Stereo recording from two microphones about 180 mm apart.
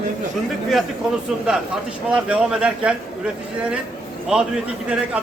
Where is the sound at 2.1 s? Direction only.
5° right (ahead or behind).